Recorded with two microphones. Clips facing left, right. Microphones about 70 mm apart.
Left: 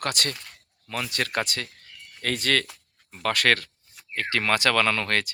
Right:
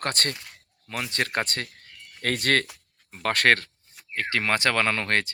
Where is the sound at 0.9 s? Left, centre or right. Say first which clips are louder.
Even; right.